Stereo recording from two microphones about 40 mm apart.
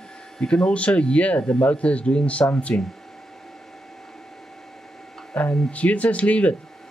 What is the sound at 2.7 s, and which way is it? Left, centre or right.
Speech, left.